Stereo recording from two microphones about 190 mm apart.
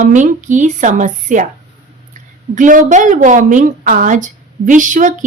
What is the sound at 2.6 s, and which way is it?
A woman's voice, 40° right (ahead or behind).